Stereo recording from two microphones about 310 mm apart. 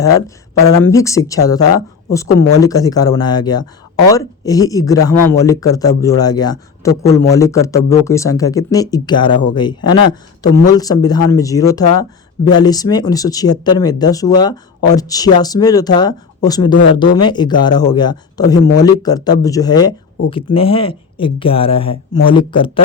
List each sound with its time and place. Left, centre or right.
0.9 s speech: centre